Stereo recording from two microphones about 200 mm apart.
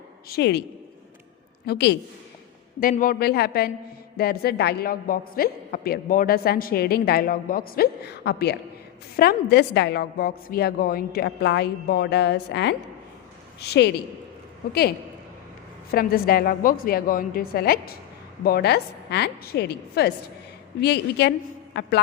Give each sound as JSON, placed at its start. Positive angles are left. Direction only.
{"t": 0.3, "sound": "a woman's voice", "side_deg": 55}
{"t": 1.6, "sound": "a woman's voice", "side_deg": 55}
{"t": 2.9, "sound": "a woman's voice", "side_deg": 45}